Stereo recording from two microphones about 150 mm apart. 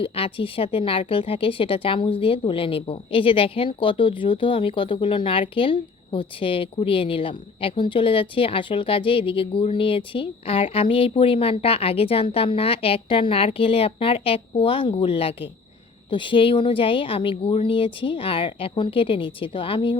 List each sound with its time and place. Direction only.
0.0 s speech: 35° left (ahead or behind)